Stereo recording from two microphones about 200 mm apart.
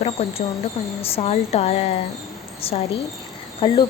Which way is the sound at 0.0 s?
30° left (ahead or behind).